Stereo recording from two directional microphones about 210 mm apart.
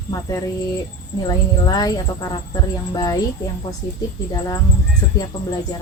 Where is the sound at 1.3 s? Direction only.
20° left (ahead or behind).